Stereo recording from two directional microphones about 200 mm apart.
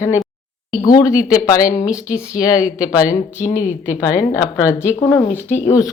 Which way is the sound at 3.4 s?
40° left (ahead or behind).